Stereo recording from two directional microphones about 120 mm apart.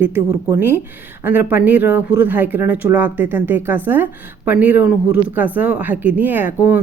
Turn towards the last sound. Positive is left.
turn(degrees=-15)  # may be behind; listen again after turning